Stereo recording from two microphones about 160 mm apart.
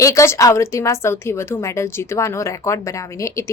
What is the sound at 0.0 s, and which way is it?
A woman's voice, 20° left (ahead or behind).